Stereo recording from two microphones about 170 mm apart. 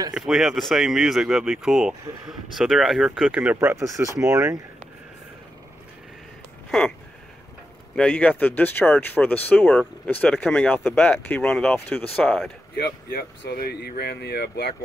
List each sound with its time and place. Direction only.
0.1 s speech: centre (ahead or behind)
3.5 s speech: 15° right (ahead or behind)
7.9 s speech: 5° left (ahead or behind)
13.1 s speech: 65° left (ahead or behind)